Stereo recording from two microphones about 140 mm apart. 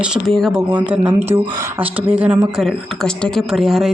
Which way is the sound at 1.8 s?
40° right (ahead or behind).